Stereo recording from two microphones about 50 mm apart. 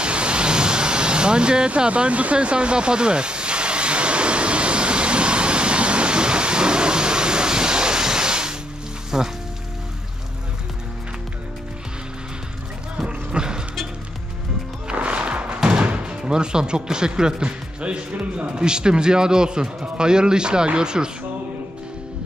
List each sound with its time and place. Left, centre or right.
0.0 s vehicle: right
9.1 s speech: centre
13.0 s a sound: centre
14.9 s music: right
15.6 s speech: centre